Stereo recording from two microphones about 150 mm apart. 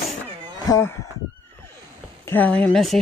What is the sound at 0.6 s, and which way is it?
Chicken, 20° left (ahead or behind).